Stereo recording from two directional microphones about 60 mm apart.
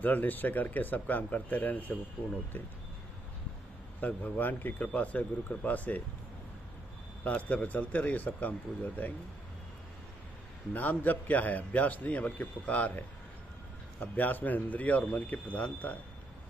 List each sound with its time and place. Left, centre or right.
0.0 s a man's voice: left
4.0 s a man's voice: left
7.2 s a man's voice: left
10.7 s a man's voice: left